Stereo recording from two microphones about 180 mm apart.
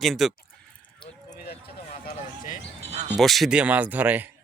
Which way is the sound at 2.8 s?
40° right (ahead or behind).